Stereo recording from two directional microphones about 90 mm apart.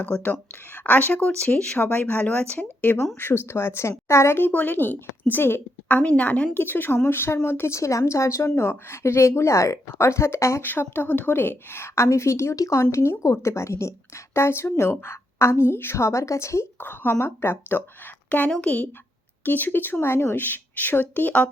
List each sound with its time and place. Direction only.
0.0 s a woman's voice: 20° left (ahead or behind)